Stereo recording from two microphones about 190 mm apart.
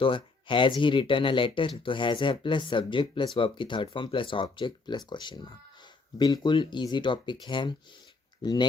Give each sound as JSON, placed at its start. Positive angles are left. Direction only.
{"t": 0.0, "sound": "speech", "side_deg": 25}